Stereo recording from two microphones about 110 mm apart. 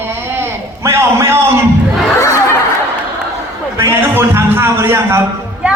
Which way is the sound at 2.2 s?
30° left (ahead or behind).